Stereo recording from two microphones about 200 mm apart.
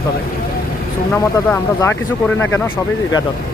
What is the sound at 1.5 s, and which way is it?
Speech, 10° left (ahead or behind).